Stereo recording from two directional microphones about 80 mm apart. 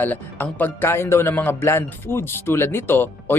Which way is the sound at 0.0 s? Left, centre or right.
Left.